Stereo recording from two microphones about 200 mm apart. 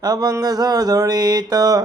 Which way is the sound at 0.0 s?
20° right (ahead or behind).